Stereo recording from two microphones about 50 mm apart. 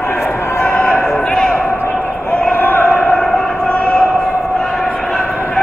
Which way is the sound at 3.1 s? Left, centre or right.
Centre.